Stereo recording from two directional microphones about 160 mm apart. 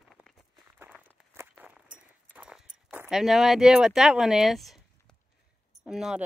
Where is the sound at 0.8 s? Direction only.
15° right (ahead or behind).